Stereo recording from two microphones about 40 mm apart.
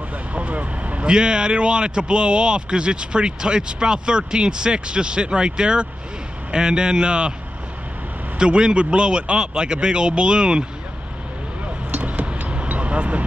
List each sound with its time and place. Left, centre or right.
0.3 s vehicle: right
1.0 s speech: right
8.4 s speech: right
11.9 s vehicle: right